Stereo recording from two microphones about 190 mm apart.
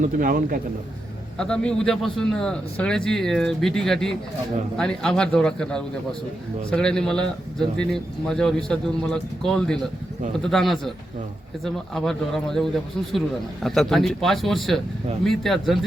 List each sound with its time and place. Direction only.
0.0 s a man's voice: 45° right (ahead or behind)
1.4 s a man's voice: 5° left (ahead or behind)